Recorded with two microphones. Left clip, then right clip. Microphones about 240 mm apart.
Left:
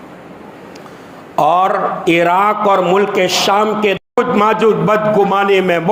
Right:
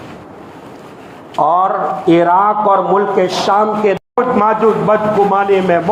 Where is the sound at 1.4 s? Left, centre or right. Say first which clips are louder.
Even; left.